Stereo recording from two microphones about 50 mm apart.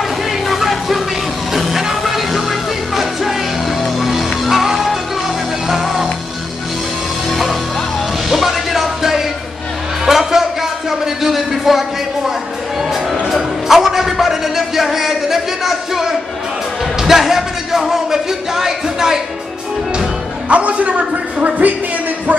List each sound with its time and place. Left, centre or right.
0.5 s music: centre
3.8 s music: centre
7.2 s music: centre
10.0 s a sound: centre
13.3 s music: centre
20.4 s a sound: right